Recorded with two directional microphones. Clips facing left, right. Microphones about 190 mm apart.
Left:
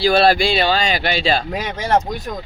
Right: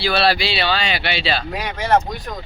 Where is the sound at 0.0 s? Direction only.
45° left (ahead or behind).